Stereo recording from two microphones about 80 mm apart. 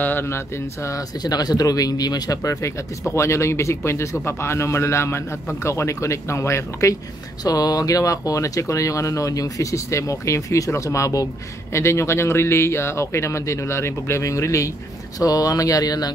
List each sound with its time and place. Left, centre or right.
0.0 s a sound: left
1.2 s speech: left
3.2 s speech: left
7.4 s speech: left